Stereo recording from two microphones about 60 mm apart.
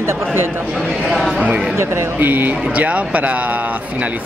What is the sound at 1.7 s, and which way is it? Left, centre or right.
Speech, right.